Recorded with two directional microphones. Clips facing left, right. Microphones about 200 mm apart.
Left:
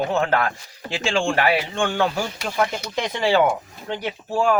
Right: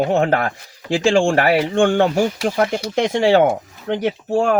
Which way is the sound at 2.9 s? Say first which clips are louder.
Right 5 dB; 70° right (ahead or behind).